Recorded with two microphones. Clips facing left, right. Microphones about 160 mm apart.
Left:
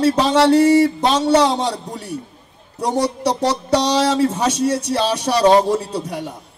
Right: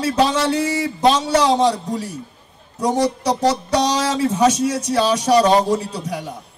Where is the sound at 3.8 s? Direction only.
65° left (ahead or behind).